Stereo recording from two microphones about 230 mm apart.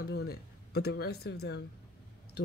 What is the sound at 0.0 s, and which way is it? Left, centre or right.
Speech, left.